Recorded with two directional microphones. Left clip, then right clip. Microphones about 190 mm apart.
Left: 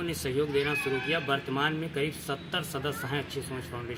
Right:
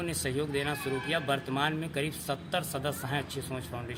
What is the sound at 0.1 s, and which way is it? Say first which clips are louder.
Speech: left 3 dB; 30° right (ahead or behind).